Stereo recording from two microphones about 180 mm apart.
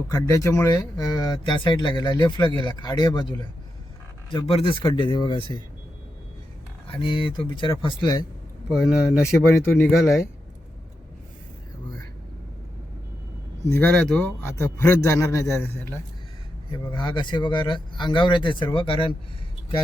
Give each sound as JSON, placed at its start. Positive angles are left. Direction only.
{"t": 0.1, "sound": "speech", "side_deg": 15}
{"t": 7.0, "sound": "speech", "side_deg": 30}
{"t": 8.7, "sound": "speech", "side_deg": 0}
{"t": 9.2, "sound": "a man's voice", "side_deg": 15}
{"t": 13.7, "sound": "a man's voice", "side_deg": 10}
{"t": 16.7, "sound": "speech", "side_deg": 25}